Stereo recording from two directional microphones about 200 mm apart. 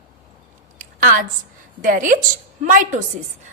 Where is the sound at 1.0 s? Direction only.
45° right (ahead or behind).